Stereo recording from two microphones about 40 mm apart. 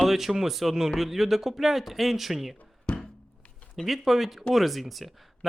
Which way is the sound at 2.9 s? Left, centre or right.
Left.